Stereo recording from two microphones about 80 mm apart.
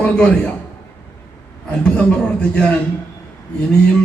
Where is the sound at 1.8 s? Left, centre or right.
Centre.